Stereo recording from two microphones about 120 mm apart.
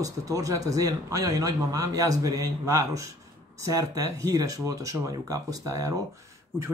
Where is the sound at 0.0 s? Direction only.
30° right (ahead or behind).